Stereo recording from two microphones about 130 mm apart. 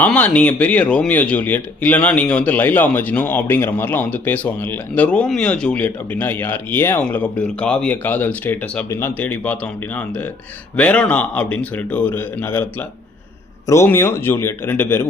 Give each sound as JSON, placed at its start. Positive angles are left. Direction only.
{"t": 0.0, "sound": "speech", "side_deg": 10}
{"t": 13.7, "sound": "speech", "side_deg": 20}